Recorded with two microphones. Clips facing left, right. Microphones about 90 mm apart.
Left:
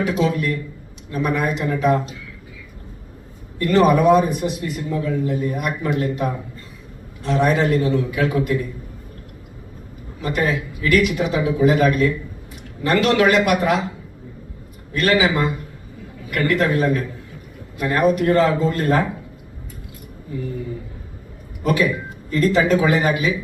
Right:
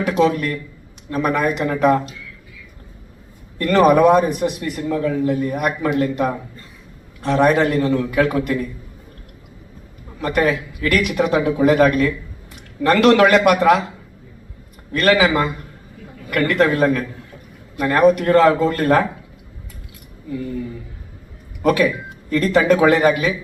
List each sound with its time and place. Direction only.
0.0 s a man's voice: 60° right (ahead or behind)
3.6 s a man's voice: 60° right (ahead or behind)
10.2 s a man's voice: 60° right (ahead or behind)
14.9 s a man's voice: 60° right (ahead or behind)
21.6 s a man's voice: 60° right (ahead or behind)